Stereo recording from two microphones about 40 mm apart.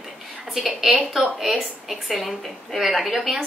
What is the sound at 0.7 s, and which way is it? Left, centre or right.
A woman's voice, centre.